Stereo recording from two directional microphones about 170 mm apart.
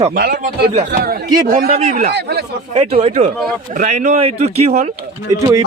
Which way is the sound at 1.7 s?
40° right (ahead or behind).